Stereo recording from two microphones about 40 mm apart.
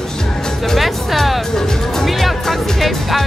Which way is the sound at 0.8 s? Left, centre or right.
Centre.